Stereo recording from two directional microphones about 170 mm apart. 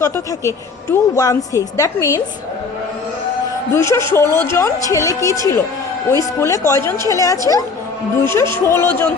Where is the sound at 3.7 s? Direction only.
15° left (ahead or behind).